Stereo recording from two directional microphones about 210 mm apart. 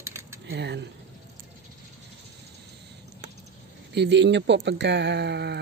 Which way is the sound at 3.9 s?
55° right (ahead or behind).